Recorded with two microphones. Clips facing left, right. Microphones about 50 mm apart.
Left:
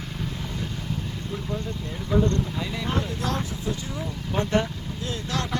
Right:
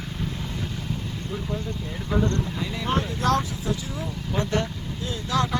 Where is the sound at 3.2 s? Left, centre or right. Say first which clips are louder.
Right 9 dB; right.